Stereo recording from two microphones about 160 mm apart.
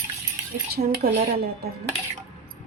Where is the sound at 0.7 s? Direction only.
75° right (ahead or behind).